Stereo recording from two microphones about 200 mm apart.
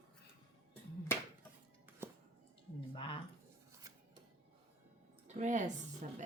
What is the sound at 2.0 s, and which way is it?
Music, 10° right (ahead or behind).